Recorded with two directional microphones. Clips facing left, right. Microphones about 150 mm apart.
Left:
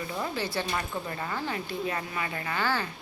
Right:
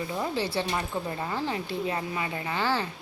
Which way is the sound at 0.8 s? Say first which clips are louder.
Right 2 dB; 20° right (ahead or behind).